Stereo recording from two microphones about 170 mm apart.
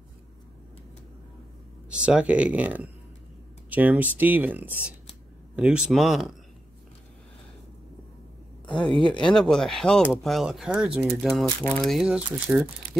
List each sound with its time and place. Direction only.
1.9 s speech: 5° right (ahead or behind)
8.6 s a sound: 30° left (ahead or behind)
9.1 s speech: 5° left (ahead or behind)